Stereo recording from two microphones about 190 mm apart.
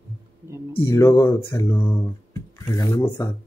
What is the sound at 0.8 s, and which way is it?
Speech, 15° left (ahead or behind).